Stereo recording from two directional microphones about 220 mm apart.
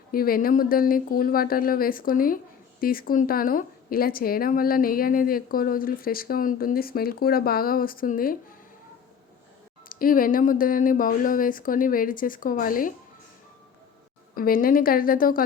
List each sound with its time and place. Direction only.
0.1 s a woman's voice: 40° left (ahead or behind)
9.9 s a woman's voice: 40° left (ahead or behind)
14.3 s a woman's voice: 40° left (ahead or behind)